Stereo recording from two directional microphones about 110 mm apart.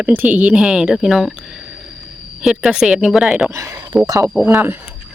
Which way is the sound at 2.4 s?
5° right (ahead or behind).